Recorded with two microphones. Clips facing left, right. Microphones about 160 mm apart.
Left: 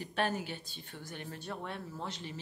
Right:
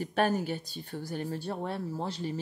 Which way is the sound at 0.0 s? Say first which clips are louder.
Right 6 dB; 45° right (ahead or behind).